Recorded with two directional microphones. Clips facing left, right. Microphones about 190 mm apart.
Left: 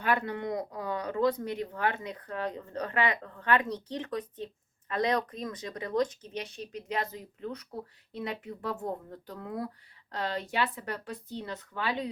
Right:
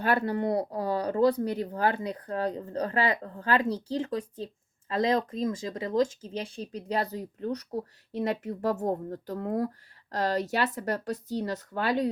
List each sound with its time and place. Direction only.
0.0 s a woman's voice: 35° right (ahead or behind)